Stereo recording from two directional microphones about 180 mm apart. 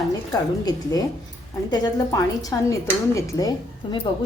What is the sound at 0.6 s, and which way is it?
A woman's voice, 20° left (ahead or behind).